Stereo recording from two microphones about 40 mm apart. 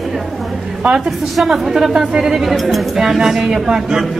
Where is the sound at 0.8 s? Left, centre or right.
Right.